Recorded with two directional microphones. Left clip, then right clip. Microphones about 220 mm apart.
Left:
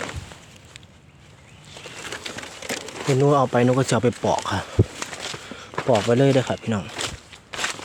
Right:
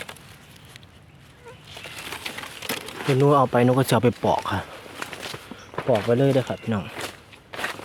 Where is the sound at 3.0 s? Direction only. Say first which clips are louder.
Even; 5° right (ahead or behind).